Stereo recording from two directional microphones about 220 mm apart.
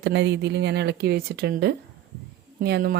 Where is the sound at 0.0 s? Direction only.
50° right (ahead or behind).